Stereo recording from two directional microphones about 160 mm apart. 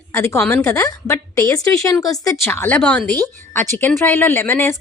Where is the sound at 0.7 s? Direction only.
20° left (ahead or behind).